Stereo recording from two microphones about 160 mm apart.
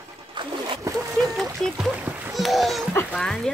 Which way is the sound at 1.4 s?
5° right (ahead or behind).